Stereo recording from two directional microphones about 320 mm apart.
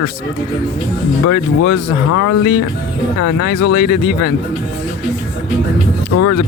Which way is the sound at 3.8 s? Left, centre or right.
Left.